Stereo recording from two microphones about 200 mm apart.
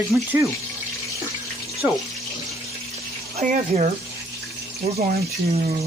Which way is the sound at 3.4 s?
35° right (ahead or behind).